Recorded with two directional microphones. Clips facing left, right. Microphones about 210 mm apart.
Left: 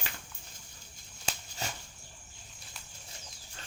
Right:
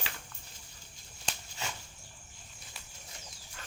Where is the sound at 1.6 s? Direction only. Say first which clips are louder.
Left 1 dB; 35° left (ahead or behind).